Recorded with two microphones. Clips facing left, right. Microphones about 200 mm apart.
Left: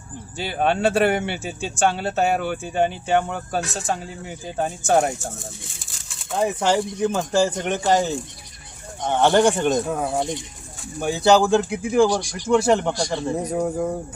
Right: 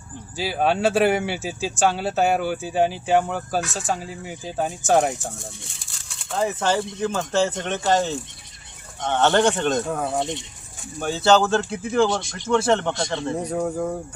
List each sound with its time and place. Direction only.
0.3 s speech: centre (ahead or behind)
6.3 s speech: 15° left (ahead or behind)
9.0 s speech: 10° left (ahead or behind)
9.8 s speech: 5° left (ahead or behind)
11.0 s speech: 15° left (ahead or behind)
12.0 s speech: 25° right (ahead or behind)
12.5 s speech: 10° left (ahead or behind)